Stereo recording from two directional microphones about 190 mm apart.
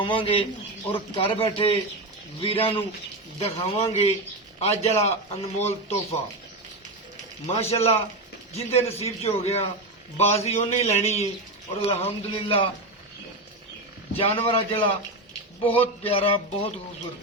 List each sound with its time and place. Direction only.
0.0 s a man's voice: 25° left (ahead or behind)
7.4 s a man's voice: 35° left (ahead or behind)
14.2 s a man's voice: 30° left (ahead or behind)